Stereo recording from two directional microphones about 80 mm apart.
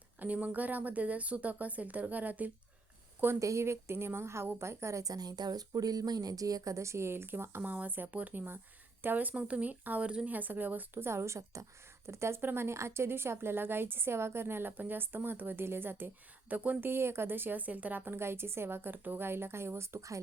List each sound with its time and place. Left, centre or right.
0.2 s a woman's voice: centre
3.4 s a woman's voice: right